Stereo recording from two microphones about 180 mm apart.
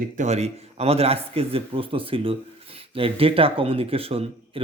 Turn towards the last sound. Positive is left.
turn(degrees=-30)  # may be behind; listen again after turning